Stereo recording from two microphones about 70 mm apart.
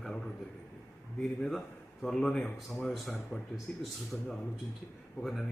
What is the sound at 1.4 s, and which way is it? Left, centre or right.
Speech, centre.